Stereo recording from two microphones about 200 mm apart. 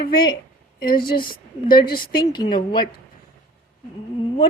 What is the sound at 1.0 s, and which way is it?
A woman's voice, 50° left (ahead or behind).